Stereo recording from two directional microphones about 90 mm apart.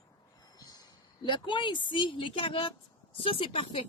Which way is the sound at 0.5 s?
45° left (ahead or behind).